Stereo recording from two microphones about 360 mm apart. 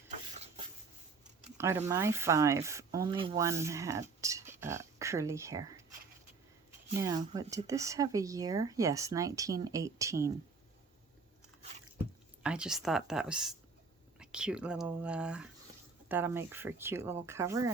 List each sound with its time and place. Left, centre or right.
0.3 s rub: centre
1.5 s speech: centre
7.0 s speech: centre
12.4 s speech: centre